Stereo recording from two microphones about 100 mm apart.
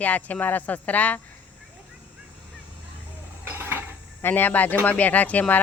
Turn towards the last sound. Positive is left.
turn(degrees=15)  # may be behind; listen again after turning